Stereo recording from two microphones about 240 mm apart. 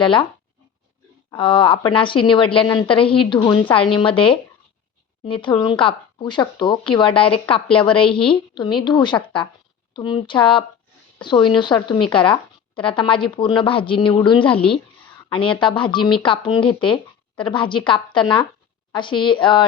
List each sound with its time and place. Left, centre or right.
0.0 s speech: left
1.3 s speech: left